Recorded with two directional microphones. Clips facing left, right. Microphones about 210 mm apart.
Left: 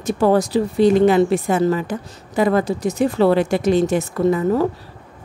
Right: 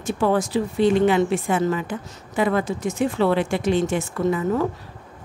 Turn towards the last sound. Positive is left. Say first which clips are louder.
# left 4 dB
turn(degrees=35)  # may be behind; listen again after turning